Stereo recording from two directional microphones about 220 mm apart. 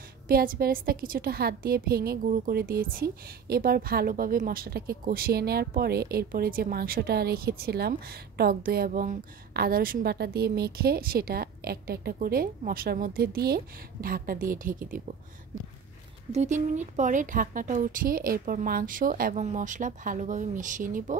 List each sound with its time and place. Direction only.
0.3 s a woman's voice: 40° right (ahead or behind)
16.3 s a woman's voice: 30° right (ahead or behind)